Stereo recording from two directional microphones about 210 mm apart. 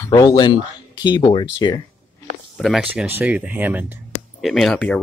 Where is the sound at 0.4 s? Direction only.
20° left (ahead or behind).